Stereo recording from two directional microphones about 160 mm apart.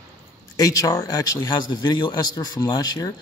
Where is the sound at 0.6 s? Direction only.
20° left (ahead or behind).